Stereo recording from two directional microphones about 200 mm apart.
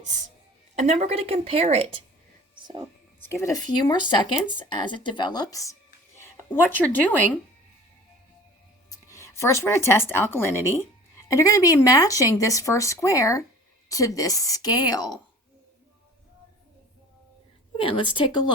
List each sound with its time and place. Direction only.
0.8 s a woman's voice: 35° right (ahead or behind)
3.4 s speech: 20° left (ahead or behind)
8.9 s speech: 15° left (ahead or behind)
17.7 s speech: 25° left (ahead or behind)